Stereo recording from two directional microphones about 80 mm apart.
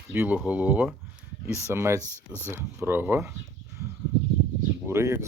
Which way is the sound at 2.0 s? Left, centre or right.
Left.